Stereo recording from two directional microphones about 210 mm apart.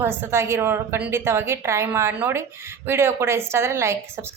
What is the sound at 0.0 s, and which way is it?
A woman's voice, 10° right (ahead or behind).